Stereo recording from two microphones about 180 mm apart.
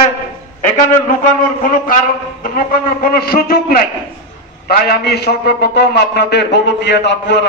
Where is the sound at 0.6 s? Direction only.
45° left (ahead or behind).